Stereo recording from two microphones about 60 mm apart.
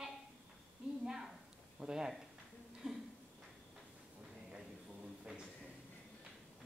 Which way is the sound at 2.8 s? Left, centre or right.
Centre.